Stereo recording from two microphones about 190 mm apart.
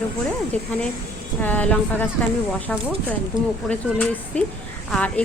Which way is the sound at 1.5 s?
10° left (ahead or behind).